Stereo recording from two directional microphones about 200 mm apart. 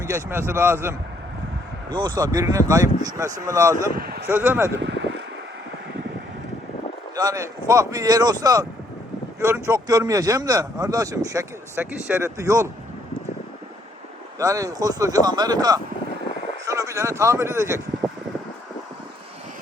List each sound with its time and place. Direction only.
0.1 s speech: 10° right (ahead or behind)
1.9 s speech: 25° right (ahead or behind)
3.9 s a sound: 50° right (ahead or behind)
4.3 s speech: 10° right (ahead or behind)
4.8 s a sound: 65° right (ahead or behind)
7.2 s speech: 15° right (ahead or behind)
11.9 s speech: 5° right (ahead or behind)
14.3 s speech: 15° right (ahead or behind)